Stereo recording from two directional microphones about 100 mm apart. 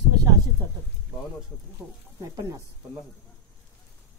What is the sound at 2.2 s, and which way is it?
Speech, 30° right (ahead or behind).